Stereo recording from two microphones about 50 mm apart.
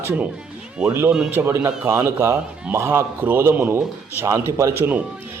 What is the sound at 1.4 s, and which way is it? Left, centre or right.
A man's voice, right.